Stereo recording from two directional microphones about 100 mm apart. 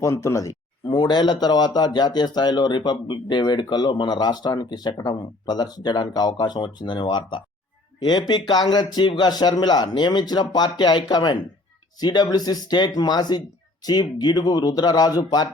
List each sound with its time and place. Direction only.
0.0 s speech: 30° left (ahead or behind)
0.9 s speech: 45° left (ahead or behind)